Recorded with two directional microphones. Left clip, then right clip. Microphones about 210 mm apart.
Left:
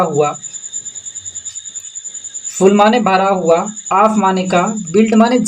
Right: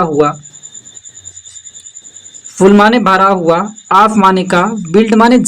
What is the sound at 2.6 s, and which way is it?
Speech, 45° right (ahead or behind).